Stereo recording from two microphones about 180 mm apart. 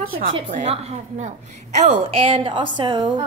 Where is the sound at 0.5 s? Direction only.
40° right (ahead or behind).